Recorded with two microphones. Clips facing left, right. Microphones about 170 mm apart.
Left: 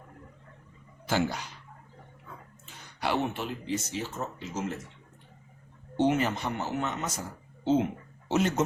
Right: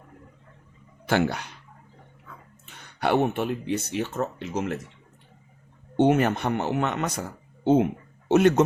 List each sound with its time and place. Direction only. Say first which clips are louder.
1.0 s speech: right 5 dB; 60° right (ahead or behind)
3.0 s speech: right 7 dB; 55° right (ahead or behind)
6.0 s speech: right 5 dB; 55° right (ahead or behind)